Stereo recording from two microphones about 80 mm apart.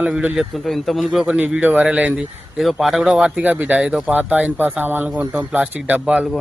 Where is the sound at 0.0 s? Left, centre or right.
Centre.